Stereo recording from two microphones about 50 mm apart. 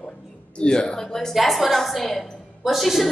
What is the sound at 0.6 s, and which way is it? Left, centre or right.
Speech, centre.